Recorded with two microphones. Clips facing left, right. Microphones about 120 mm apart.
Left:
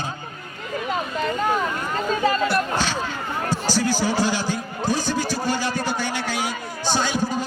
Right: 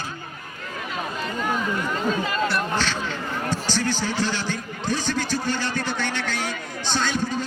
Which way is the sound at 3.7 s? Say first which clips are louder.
Left 5 dB; 10° left (ahead or behind).